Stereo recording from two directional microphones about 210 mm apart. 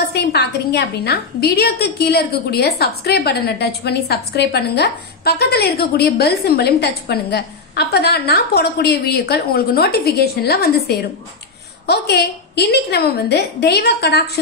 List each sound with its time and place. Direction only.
0.1 s a woman's voice: 50° left (ahead or behind)